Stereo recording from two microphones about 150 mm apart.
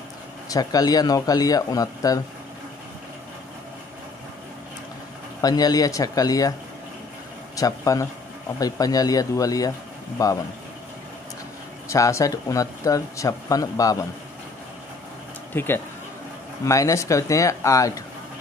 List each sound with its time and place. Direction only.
0.5 s speech: 25° left (ahead or behind)
5.4 s speech: 25° left (ahead or behind)
7.5 s speech: 20° left (ahead or behind)
11.9 s speech: 20° left (ahead or behind)
15.5 s speech: 15° left (ahead or behind)